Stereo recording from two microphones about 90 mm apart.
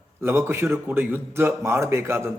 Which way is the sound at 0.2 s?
25° right (ahead or behind).